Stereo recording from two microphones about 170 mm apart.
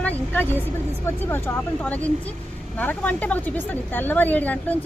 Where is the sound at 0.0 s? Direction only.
10° left (ahead or behind).